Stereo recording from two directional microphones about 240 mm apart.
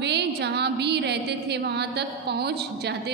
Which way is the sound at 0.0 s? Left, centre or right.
Right.